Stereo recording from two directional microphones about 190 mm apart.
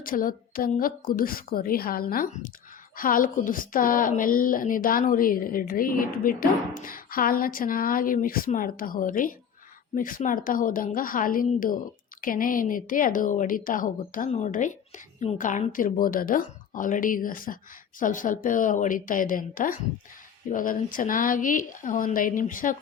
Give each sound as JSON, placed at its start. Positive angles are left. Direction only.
{"t": 0.0, "sound": "a woman's voice", "side_deg": 45}